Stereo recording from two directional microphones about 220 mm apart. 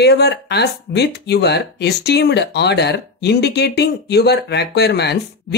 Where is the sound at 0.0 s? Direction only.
50° left (ahead or behind).